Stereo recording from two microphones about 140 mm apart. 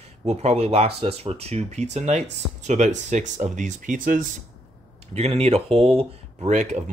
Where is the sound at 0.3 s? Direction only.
50° right (ahead or behind); by 4.3 s 80° right.